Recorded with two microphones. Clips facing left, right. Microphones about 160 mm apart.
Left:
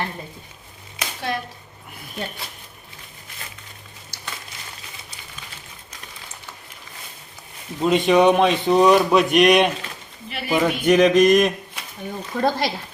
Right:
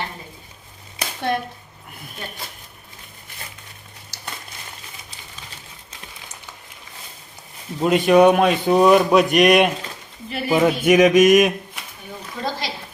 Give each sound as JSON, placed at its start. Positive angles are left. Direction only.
{"t": 7.8, "sound": "speech", "side_deg": 0}
{"t": 10.2, "sound": "speech", "side_deg": -35}
{"t": 10.6, "sound": "speech", "side_deg": -10}
{"t": 12.4, "sound": "speech", "side_deg": 55}